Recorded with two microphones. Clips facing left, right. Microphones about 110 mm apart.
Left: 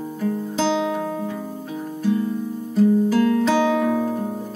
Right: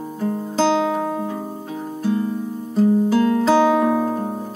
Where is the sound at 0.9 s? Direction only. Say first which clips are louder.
Right 3 dB; 10° right (ahead or behind).